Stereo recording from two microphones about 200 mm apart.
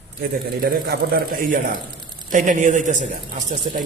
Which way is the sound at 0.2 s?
50° right (ahead or behind).